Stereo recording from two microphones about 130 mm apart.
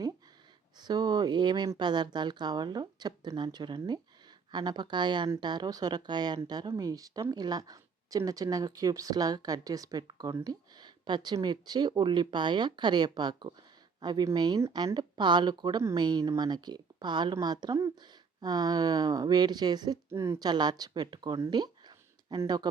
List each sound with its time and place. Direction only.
0.8 s a woman's voice: 30° right (ahead or behind)
20.1 s speech: 20° right (ahead or behind)